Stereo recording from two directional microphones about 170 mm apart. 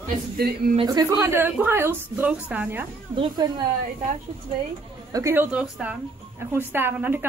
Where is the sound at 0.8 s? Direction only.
20° right (ahead or behind).